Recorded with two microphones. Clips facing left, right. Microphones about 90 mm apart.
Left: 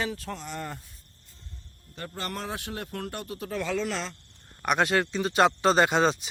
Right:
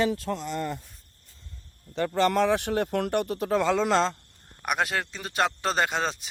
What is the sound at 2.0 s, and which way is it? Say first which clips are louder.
Speech: right 13 dB; 90° right.